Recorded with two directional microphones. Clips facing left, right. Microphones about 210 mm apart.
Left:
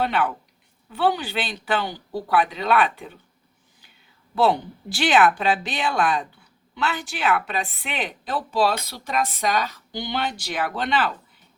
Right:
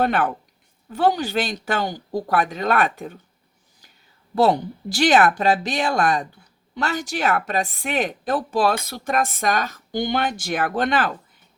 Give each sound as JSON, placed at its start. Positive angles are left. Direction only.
{"t": 0.0, "sound": "a woman's voice", "side_deg": -45}
{"t": 4.4, "sound": "a woman's voice", "side_deg": -40}